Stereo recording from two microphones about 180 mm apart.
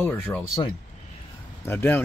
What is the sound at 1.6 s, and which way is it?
Speech, 10° left (ahead or behind).